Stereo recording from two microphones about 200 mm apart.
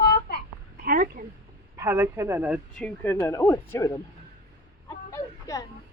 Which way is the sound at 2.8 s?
10° left (ahead or behind).